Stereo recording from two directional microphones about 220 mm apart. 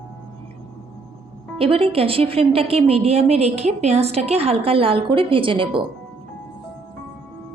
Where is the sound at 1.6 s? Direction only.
25° right (ahead or behind).